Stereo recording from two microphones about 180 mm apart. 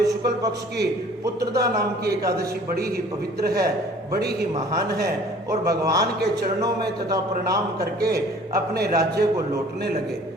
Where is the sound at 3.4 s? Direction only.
60° right (ahead or behind).